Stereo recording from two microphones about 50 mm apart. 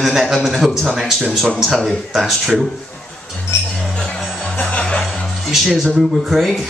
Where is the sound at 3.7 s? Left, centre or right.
Centre.